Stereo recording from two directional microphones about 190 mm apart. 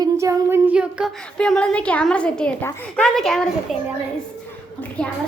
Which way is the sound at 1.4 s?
5° left (ahead or behind).